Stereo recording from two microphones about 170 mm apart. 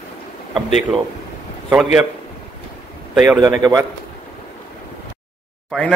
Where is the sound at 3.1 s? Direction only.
5° right (ahead or behind).